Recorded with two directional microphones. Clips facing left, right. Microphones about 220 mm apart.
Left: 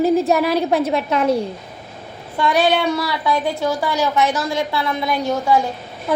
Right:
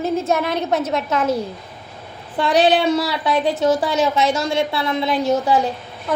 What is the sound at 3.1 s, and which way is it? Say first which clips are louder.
A woman's voice: right 1 dB; 20° right (ahead or behind).